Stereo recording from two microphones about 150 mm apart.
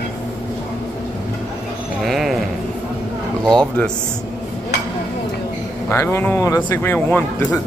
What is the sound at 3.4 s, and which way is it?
Speech, 5° left (ahead or behind).